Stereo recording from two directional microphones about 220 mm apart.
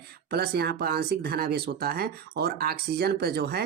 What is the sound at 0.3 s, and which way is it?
Speech, 45° right (ahead or behind).